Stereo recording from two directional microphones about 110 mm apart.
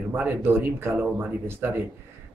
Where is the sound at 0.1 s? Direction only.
20° right (ahead or behind).